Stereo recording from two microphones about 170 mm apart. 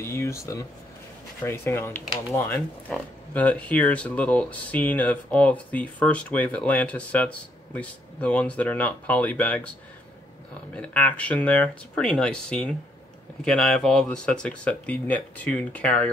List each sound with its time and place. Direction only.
0.0 s speech: 15° left (ahead or behind)
10.8 s speech: 10° left (ahead or behind)